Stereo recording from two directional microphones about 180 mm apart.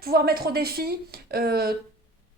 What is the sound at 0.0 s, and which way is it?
Speech, 60° right (ahead or behind).